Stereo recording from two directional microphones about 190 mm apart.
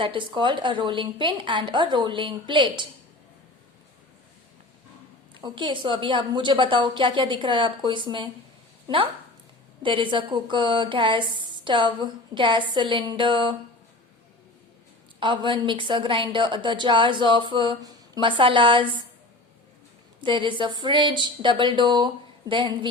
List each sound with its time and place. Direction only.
0.0 s a woman's voice: 25° right (ahead or behind)
5.3 s a woman's voice: 25° right (ahead or behind)
9.8 s a woman's voice: 25° right (ahead or behind)
15.2 s a woman's voice: 25° right (ahead or behind)
20.2 s a woman's voice: 25° right (ahead or behind)